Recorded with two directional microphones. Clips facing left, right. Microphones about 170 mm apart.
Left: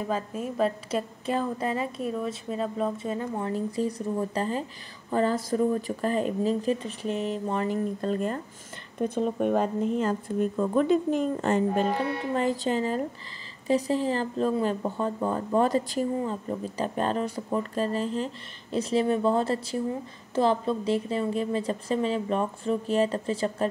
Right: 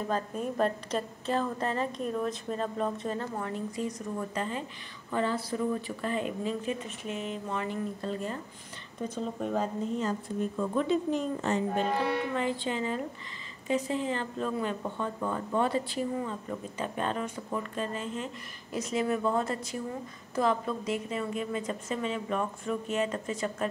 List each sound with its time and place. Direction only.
0.1 s a woman's voice: 5° left (ahead or behind)
3.3 s a woman's voice: 35° left (ahead or behind); by 11.8 s 55° left (ahead or behind)
12.4 s speech: 40° left (ahead or behind)